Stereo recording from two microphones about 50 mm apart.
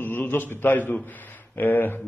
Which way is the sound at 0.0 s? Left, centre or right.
Left.